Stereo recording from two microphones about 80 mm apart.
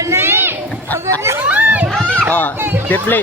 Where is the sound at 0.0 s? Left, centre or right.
Right.